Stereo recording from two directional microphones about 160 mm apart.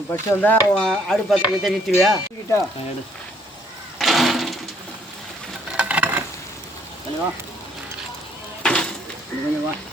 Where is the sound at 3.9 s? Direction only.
Centre (ahead or behind).